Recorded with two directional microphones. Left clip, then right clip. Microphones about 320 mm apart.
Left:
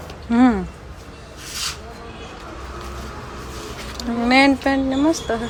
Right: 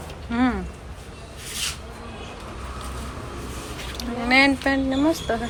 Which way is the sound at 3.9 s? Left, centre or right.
Centre.